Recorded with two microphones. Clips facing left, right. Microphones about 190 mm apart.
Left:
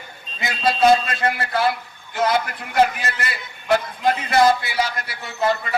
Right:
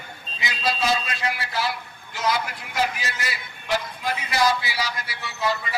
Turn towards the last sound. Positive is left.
turn(degrees=50)  # may be behind; listen again after turning